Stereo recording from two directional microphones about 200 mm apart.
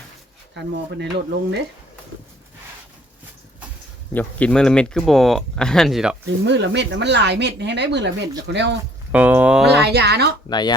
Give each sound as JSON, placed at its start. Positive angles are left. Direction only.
{"t": 0.5, "sound": "speech", "side_deg": -60}
{"t": 4.1, "sound": "speech", "side_deg": 10}
{"t": 6.4, "sound": "speech", "side_deg": -60}
{"t": 9.1, "sound": "speech", "side_deg": -5}
{"t": 9.6, "sound": "speech", "side_deg": -55}
{"t": 10.5, "sound": "speech", "side_deg": 20}